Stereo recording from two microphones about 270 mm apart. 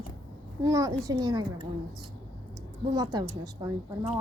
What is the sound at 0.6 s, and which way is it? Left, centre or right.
A woman's voice, centre.